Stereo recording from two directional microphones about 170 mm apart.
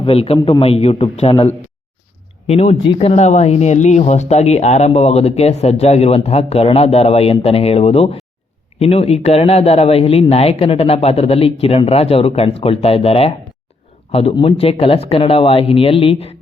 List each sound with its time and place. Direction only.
0.0 s speech: 35° left (ahead or behind)